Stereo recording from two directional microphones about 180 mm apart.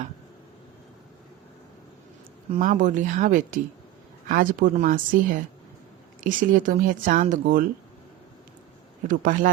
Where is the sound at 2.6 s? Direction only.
45° right (ahead or behind).